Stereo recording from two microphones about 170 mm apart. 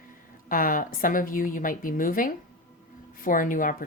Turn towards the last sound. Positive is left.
turn(degrees=50)  # may be behind; listen again after turning